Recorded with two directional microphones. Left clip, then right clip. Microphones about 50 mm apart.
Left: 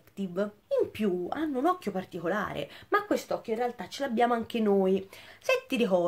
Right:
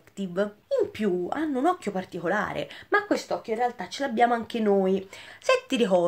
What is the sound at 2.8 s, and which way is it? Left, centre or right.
Speech, centre.